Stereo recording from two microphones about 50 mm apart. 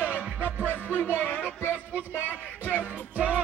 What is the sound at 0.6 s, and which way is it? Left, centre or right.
Music, left.